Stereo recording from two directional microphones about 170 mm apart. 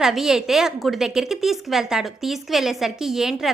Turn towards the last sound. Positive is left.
turn(degrees=-5)  # may be behind; listen again after turning